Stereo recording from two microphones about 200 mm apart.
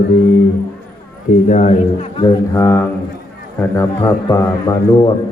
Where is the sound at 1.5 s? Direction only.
35° left (ahead or behind).